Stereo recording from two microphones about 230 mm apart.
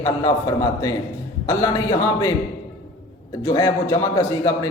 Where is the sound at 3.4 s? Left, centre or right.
Centre.